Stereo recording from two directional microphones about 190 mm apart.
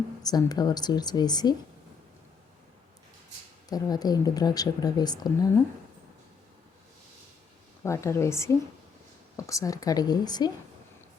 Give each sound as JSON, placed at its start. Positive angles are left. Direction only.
{"t": 0.2, "sound": "speech", "side_deg": 20}
{"t": 3.7, "sound": "speech", "side_deg": 20}
{"t": 7.9, "sound": "a woman's voice", "side_deg": 15}